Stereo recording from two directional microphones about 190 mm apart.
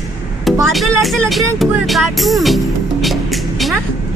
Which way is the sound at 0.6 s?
Centre (ahead or behind).